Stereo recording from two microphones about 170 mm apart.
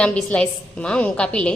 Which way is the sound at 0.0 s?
5° left (ahead or behind).